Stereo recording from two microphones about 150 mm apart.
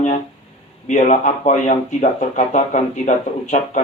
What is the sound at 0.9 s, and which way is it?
Speech, 55° left (ahead or behind).